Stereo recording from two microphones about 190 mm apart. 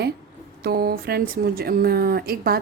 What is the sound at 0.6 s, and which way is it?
A woman's voice, 55° right (ahead or behind).